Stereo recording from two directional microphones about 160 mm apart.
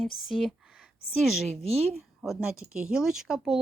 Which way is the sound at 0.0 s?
Centre (ahead or behind).